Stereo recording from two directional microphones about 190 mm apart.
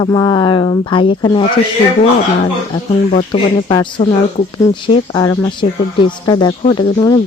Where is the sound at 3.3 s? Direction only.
25° left (ahead or behind).